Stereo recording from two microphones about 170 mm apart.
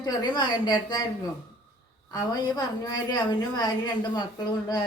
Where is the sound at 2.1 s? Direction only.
20° left (ahead or behind).